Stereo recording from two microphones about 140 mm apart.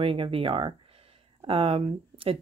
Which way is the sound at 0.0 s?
40° right (ahead or behind).